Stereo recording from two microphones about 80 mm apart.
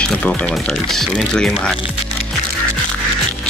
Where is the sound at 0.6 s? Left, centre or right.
Centre.